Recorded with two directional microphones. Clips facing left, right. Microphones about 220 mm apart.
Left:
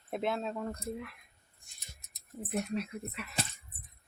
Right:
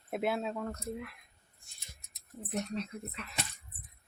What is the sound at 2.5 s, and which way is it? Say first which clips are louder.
Speech: left 2 dB; 10° left (ahead or behind).